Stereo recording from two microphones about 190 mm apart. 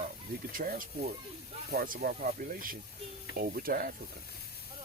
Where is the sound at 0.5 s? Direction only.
50° right (ahead or behind).